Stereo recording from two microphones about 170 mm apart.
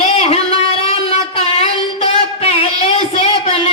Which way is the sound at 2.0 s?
35° left (ahead or behind).